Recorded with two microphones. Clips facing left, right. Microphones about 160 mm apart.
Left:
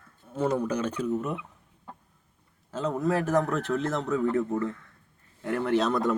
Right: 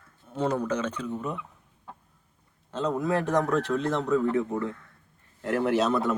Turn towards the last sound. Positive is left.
turn(degrees=-5)  # may be behind; listen again after turning